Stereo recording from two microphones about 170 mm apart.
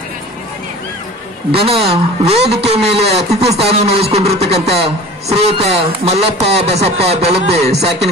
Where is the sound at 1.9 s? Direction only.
35° right (ahead or behind).